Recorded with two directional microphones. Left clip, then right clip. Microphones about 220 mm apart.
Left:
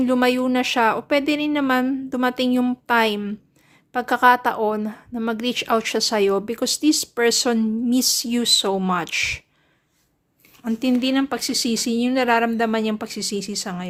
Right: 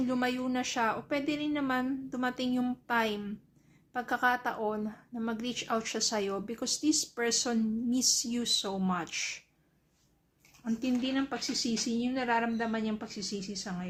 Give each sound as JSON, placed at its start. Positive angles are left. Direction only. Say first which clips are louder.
{"t": 0.0, "sound": "a woman's voice", "louder": "left 13 dB", "side_deg": 40}
{"t": 10.6, "sound": "speech", "louder": "left 11 dB", "side_deg": 45}